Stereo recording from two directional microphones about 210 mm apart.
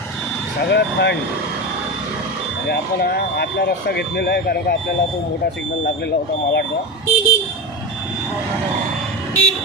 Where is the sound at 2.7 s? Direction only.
50° left (ahead or behind).